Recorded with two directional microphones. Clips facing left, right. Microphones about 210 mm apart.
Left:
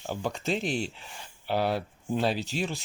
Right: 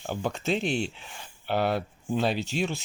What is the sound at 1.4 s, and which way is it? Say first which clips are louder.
Speech: right 1 dB; centre (ahead or behind).